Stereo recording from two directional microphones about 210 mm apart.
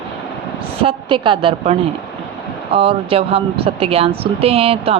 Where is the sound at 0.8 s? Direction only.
25° right (ahead or behind).